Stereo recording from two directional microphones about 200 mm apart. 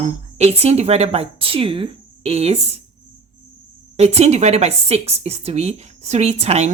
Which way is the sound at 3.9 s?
30° right (ahead or behind).